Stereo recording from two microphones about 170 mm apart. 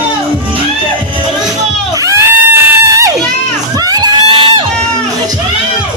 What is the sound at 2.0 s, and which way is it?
Crowd, 15° right (ahead or behind).